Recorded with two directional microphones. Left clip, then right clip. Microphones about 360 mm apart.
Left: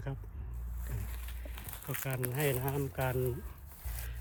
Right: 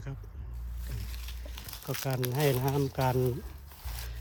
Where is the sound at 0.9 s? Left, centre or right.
Centre.